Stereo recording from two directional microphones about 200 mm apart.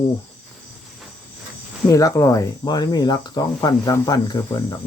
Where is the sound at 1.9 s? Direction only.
15° left (ahead or behind).